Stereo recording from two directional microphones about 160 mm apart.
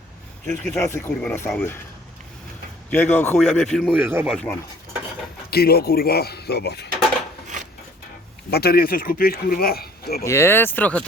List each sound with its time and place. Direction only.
0.4 s speech: 10° left (ahead or behind)
2.9 s speech: 10° left (ahead or behind)
3.9 s speech: 10° right (ahead or behind)
5.5 s speech: 75° left (ahead or behind)
8.4 s speech: 85° left
10.2 s speech: 15° left (ahead or behind)